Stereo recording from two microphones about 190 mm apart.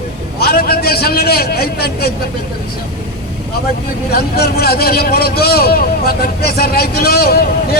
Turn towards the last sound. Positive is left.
turn(degrees=50)  # may be behind; listen again after turning